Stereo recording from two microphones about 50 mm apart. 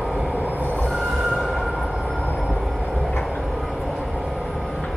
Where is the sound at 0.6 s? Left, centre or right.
Left.